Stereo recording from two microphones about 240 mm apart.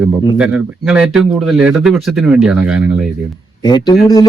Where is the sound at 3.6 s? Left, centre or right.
Centre.